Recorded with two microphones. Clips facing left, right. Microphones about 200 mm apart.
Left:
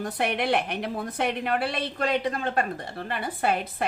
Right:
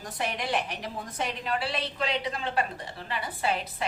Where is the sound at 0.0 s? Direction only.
60° left (ahead or behind).